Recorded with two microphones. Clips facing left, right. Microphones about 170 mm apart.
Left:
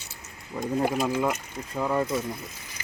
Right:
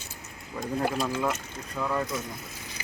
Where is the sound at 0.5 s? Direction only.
10° left (ahead or behind).